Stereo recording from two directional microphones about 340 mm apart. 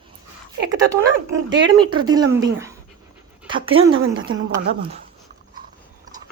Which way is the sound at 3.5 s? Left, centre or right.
Centre.